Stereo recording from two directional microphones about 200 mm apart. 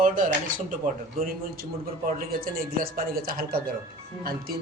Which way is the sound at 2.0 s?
45° right (ahead or behind).